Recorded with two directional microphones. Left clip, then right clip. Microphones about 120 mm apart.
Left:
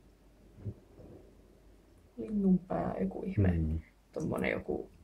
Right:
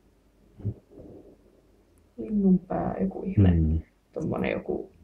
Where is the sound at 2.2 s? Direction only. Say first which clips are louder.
Right 6 dB; 30° left (ahead or behind).